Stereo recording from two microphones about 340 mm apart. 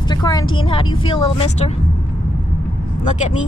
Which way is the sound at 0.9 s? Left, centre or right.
Centre.